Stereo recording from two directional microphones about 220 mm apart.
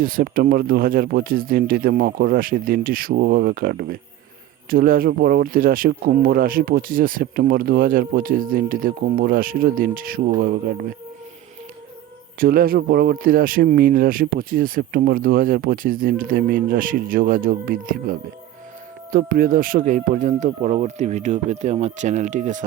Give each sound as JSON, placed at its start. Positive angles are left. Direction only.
{"t": 0.0, "sound": "speech", "side_deg": -40}
{"t": 12.4, "sound": "speech", "side_deg": -40}